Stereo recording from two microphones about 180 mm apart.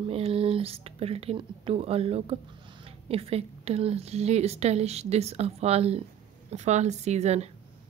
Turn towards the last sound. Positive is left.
turn(degrees=-35)  # may be behind; listen again after turning